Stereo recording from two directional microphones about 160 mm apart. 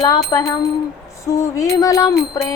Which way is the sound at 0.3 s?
25° left (ahead or behind).